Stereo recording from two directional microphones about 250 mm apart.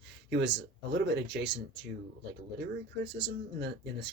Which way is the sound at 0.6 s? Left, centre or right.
Right.